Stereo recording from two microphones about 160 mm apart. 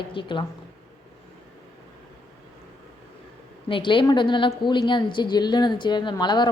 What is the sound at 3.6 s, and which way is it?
A woman's voice, 30° left (ahead or behind).